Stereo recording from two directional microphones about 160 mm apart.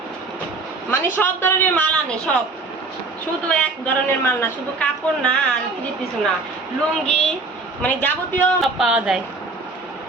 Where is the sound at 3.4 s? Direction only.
10° left (ahead or behind).